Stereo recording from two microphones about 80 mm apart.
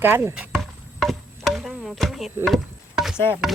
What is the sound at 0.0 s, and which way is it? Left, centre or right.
Speech, right.